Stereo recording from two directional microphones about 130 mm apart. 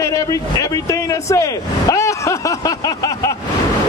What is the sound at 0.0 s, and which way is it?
Speech, 25° left (ahead or behind).